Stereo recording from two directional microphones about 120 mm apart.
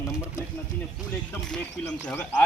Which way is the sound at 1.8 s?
30° left (ahead or behind).